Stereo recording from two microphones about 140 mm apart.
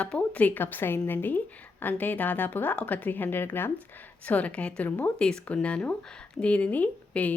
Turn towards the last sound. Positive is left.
turn(degrees=10)  # may be behind; listen again after turning